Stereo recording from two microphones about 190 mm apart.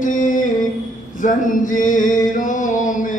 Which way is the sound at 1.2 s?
45° left (ahead or behind).